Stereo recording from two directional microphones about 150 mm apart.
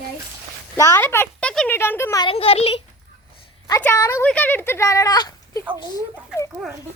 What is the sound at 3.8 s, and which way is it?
Speech, 15° left (ahead or behind).